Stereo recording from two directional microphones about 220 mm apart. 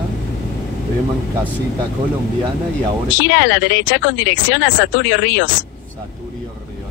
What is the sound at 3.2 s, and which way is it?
Speech, 60° left (ahead or behind).